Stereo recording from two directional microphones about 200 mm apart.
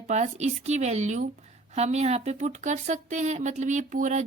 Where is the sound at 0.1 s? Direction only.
35° right (ahead or behind).